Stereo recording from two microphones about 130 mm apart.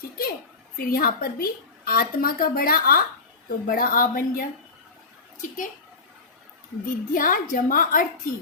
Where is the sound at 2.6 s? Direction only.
90° left.